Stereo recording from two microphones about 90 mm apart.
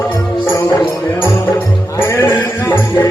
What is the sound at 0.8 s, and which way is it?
Music, 25° left (ahead or behind).